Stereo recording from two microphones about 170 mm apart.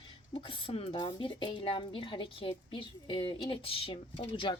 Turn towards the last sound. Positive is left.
turn(degrees=30)  # may be behind; listen again after turning